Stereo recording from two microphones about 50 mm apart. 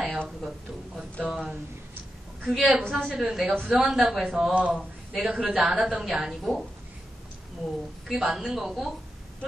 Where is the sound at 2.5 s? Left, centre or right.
Centre.